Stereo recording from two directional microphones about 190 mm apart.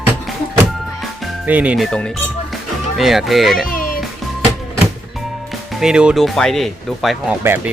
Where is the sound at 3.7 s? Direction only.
45° left (ahead or behind).